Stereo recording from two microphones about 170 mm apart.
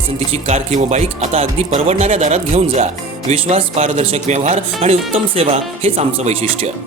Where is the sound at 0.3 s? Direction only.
40° right (ahead or behind).